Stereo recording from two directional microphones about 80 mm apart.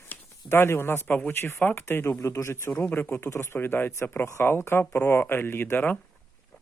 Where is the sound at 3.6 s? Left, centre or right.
Left.